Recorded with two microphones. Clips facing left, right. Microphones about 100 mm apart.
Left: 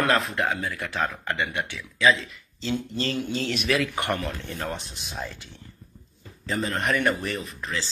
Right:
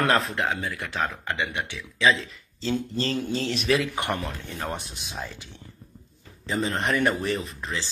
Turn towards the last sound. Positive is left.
turn(degrees=-30)  # may be behind; listen again after turning